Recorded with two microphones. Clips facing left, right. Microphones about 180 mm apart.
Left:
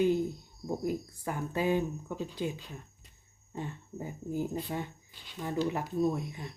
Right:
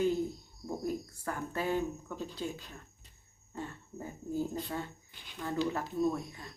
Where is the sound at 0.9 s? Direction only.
15° left (ahead or behind).